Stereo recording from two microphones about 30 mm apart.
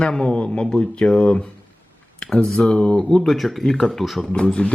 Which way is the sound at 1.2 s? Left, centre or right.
Left.